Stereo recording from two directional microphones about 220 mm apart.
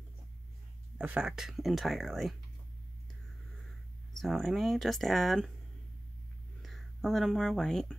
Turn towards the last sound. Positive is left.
turn(degrees=5)  # may be behind; listen again after turning